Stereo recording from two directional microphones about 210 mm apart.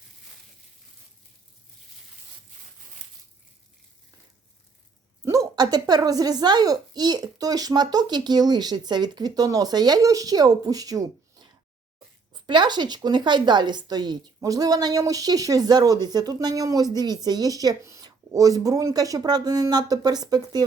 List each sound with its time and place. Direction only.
5.2 s speech: 15° right (ahead or behind)
12.5 s speech: 20° right (ahead or behind)